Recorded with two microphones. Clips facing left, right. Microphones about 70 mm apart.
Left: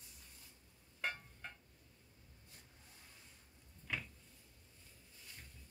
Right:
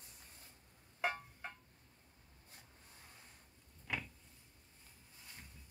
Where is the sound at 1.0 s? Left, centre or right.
Centre.